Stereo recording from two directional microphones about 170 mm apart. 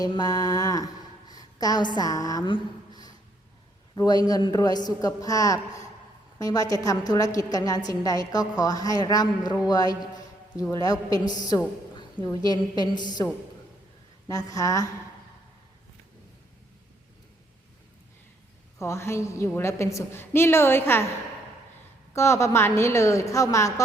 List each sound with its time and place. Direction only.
0.0 s a woman's voice: 25° left (ahead or behind)
14.3 s a woman's voice: 20° left (ahead or behind)
18.8 s a woman's voice: 15° left (ahead or behind)
22.1 s a woman's voice: 15° left (ahead or behind)